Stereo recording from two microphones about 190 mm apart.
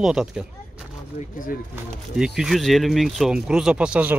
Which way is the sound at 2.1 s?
5° right (ahead or behind).